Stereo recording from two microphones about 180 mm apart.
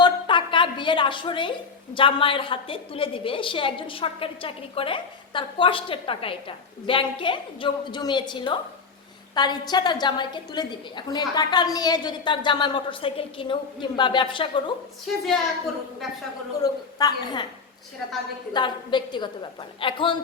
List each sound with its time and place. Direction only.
0.0 s a woman's voice: 25° left (ahead or behind)
15.0 s a woman's voice: centre (ahead or behind)
16.6 s a woman's voice: 20° left (ahead or behind)
18.5 s a woman's voice: 25° left (ahead or behind)